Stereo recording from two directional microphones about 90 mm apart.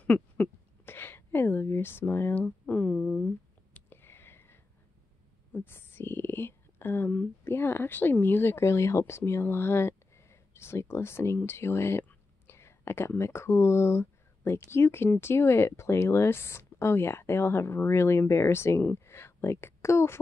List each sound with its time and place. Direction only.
0.0 s speech: 20° left (ahead or behind)
3.7 s a sound: 25° left (ahead or behind)
5.5 s speech: 25° left (ahead or behind)